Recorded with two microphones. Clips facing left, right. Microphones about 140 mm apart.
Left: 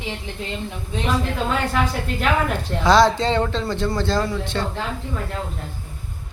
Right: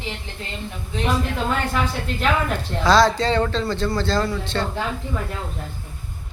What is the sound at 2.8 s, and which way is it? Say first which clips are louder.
A man's voice: left 1 dB; 20° left (ahead or behind).